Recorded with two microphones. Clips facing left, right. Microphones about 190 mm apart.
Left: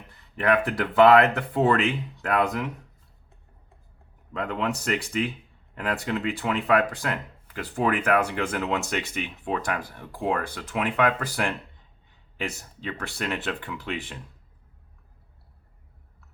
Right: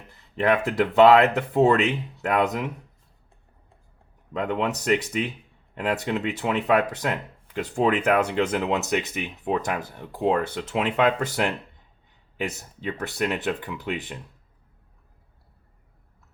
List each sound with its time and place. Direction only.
0.3 s speech: 25° right (ahead or behind)
4.4 s speech: 20° right (ahead or behind)